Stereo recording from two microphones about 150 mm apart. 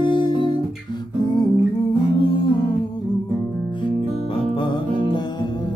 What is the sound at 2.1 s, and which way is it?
Music, 35° left (ahead or behind).